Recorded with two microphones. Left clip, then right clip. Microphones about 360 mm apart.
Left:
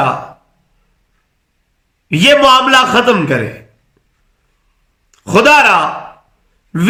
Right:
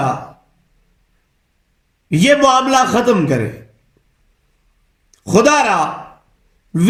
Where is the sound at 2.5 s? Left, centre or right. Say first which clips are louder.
Left 4 dB; centre.